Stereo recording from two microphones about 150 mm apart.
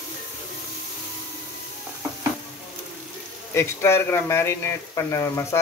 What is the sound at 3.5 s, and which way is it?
Speech, 15° left (ahead or behind).